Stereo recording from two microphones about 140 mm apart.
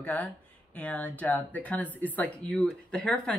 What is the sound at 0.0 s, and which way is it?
Speech, 10° left (ahead or behind).